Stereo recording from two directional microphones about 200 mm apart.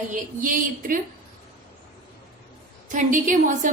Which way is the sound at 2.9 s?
40° right (ahead or behind).